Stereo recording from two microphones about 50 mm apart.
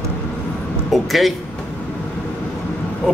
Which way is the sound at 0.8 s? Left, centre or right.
Centre.